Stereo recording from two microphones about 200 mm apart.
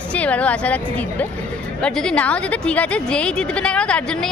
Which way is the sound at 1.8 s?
5° left (ahead or behind).